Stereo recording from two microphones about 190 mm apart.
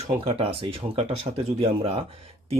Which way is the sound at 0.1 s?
30° right (ahead or behind).